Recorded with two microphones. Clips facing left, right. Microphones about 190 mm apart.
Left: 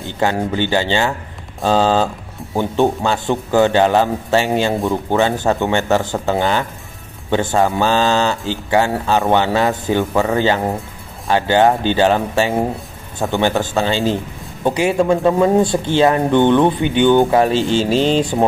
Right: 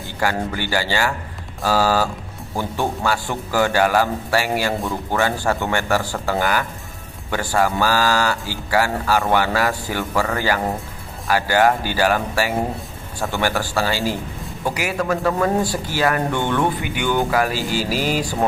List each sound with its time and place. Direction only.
0.0 s a man's voice: 20° left (ahead or behind)